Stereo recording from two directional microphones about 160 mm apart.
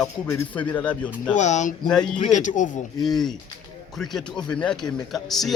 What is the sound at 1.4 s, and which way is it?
Speech, 50° left (ahead or behind).